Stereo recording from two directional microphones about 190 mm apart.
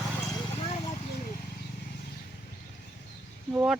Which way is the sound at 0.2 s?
20° left (ahead or behind).